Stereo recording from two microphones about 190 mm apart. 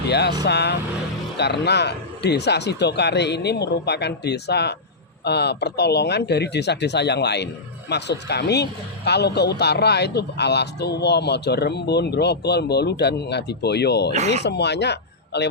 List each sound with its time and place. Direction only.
0.1 s a man's voice: 60° left (ahead or behind)
14.1 s speech: 35° right (ahead or behind)
14.4 s speech: 65° left (ahead or behind)